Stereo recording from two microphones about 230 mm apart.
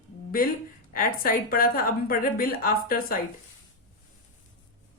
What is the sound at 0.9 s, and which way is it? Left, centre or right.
A woman's voice, left.